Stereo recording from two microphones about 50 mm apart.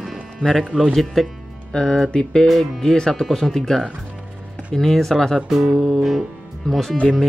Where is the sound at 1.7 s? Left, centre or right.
Centre.